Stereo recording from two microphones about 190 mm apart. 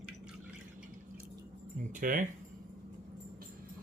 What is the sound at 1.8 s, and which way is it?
Speech, 45° right (ahead or behind).